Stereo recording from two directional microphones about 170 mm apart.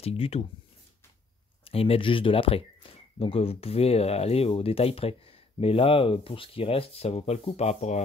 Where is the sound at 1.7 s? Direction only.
35° left (ahead or behind).